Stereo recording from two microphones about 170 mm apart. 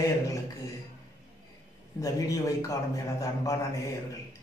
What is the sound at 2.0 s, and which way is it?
A man's voice, 20° left (ahead or behind).